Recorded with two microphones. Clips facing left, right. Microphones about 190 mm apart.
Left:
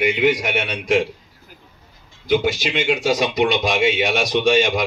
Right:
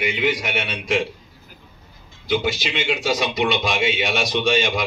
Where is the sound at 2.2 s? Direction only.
45° left (ahead or behind).